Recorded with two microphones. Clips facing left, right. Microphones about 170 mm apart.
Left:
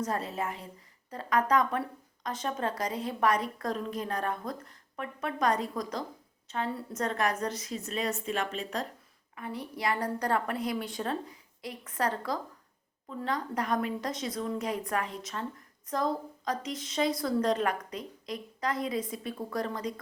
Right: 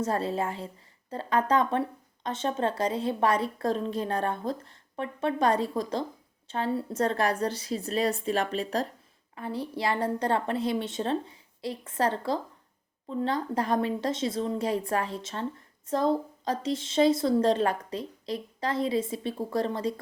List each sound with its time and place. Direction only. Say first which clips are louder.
0.0 s a woman's voice: right 4 dB; 30° right (ahead or behind)